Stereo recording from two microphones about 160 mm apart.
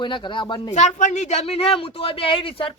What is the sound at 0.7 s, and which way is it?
Speech, 50° left (ahead or behind).